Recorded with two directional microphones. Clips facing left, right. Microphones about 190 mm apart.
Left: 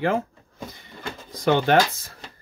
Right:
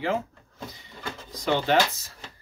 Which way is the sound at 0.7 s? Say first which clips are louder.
Left 2 dB; 55° left (ahead or behind).